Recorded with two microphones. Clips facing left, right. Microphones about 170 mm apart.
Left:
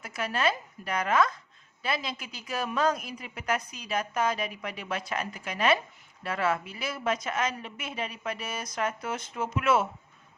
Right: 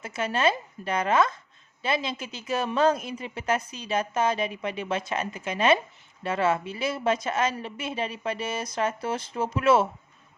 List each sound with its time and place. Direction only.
0.0 s a woman's voice: 25° right (ahead or behind)